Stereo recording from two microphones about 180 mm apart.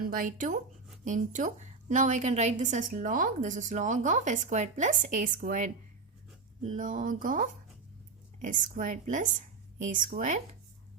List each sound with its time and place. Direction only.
0.0 s a woman's voice: 50° right (ahead or behind)